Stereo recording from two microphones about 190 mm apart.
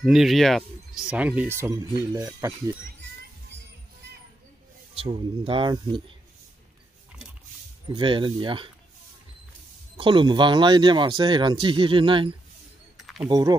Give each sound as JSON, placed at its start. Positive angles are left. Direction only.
{"t": 0.0, "sound": "speech", "side_deg": 0}
{"t": 4.9, "sound": "speech", "side_deg": -30}
{"t": 7.9, "sound": "speech", "side_deg": -25}
{"t": 9.9, "sound": "speech", "side_deg": -25}
{"t": 12.9, "sound": "a sound", "side_deg": 0}
{"t": 13.3, "sound": "speech", "side_deg": -20}